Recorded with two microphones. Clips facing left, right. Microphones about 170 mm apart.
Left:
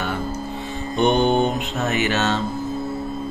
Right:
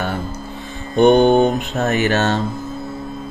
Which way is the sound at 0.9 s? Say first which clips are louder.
Right 7 dB; 50° right (ahead or behind).